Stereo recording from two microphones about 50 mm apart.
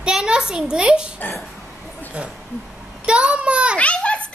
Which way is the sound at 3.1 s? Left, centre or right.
Right.